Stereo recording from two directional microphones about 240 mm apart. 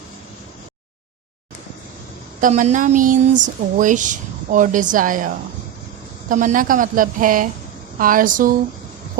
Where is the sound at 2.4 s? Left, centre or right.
Right.